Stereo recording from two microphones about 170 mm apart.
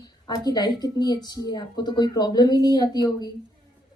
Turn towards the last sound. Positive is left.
turn(degrees=25)  # may be behind; listen again after turning